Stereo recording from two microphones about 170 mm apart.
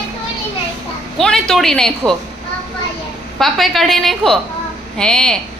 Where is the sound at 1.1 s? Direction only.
Centre (ahead or behind).